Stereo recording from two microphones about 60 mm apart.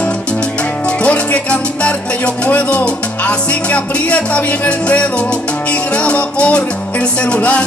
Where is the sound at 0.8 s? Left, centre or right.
Centre.